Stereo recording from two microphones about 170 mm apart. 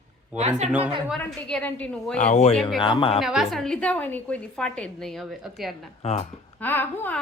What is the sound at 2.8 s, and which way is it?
Speech, 30° left (ahead or behind).